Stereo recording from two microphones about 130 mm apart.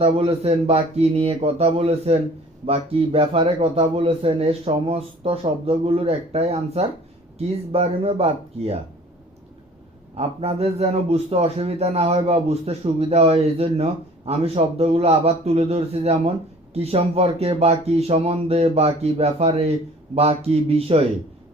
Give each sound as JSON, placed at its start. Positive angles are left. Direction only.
{"t": 0.0, "sound": "a man's voice", "side_deg": -50}
{"t": 10.2, "sound": "a man's voice", "side_deg": -50}